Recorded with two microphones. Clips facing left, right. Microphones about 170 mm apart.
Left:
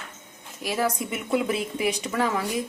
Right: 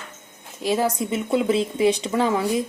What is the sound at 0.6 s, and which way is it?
Speech, 25° right (ahead or behind).